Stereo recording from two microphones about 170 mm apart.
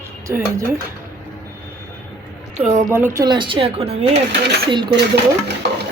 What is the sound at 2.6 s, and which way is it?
Speech, 40° right (ahead or behind).